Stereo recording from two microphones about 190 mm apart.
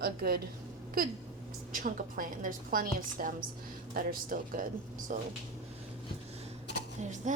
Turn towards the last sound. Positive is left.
turn(degrees=-40)  # may be behind; listen again after turning